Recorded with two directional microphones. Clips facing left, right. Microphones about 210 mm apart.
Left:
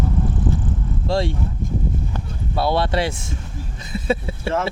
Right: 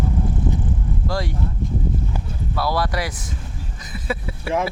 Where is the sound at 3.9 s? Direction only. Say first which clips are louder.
Left 5 dB; 25° left (ahead or behind).